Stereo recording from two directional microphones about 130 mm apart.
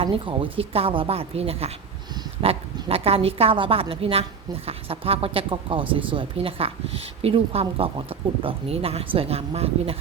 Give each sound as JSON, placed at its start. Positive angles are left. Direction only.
{"t": 0.0, "sound": "a woman's voice", "side_deg": -40}